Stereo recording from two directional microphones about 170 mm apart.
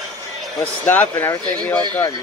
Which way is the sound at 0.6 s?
10° left (ahead or behind).